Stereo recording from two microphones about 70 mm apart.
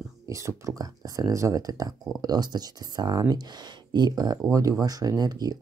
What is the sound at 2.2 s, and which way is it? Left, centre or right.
Speech, right.